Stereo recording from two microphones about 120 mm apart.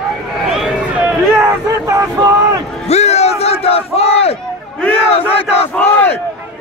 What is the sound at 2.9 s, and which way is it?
Battle cry, 65° left (ahead or behind).